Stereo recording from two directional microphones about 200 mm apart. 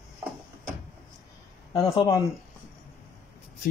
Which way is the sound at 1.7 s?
15° left (ahead or behind).